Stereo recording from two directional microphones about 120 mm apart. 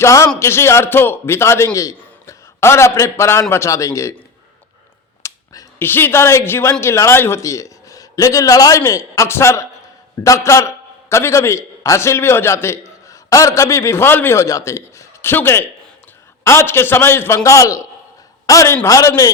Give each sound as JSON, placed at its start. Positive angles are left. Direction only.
{"t": 0.0, "sound": "a man's voice", "side_deg": 25}
{"t": 5.2, "sound": "a man's voice", "side_deg": 20}